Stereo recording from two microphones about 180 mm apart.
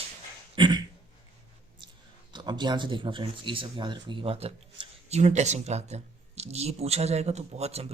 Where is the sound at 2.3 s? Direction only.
25° right (ahead or behind).